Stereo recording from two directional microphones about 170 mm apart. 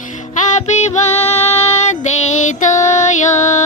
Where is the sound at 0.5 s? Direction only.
40° left (ahead or behind).